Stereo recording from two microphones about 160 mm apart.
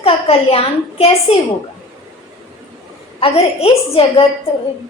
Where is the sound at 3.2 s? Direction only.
40° left (ahead or behind).